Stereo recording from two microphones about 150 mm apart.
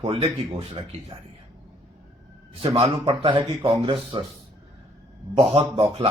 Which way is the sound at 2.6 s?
45° right (ahead or behind).